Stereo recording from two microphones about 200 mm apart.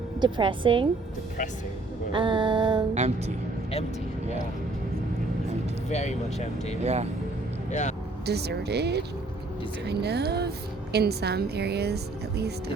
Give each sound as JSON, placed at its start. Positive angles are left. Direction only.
{"t": 0.2, "sound": "a woman's voice", "side_deg": -25}
{"t": 2.1, "sound": "a woman's voice", "side_deg": -25}
{"t": 2.9, "sound": "speech", "side_deg": -35}
{"t": 5.9, "sound": "speech", "side_deg": 35}
{"t": 6.8, "sound": "speech", "side_deg": -35}
{"t": 7.7, "sound": "speech", "side_deg": 35}
{"t": 8.3, "sound": "a woman's voice", "side_deg": -55}